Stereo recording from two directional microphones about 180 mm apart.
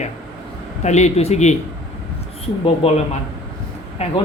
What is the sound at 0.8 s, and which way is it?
Speech, 40° left (ahead or behind).